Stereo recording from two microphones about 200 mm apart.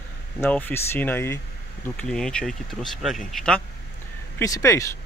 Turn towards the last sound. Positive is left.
turn(degrees=15)  # may be behind; listen again after turning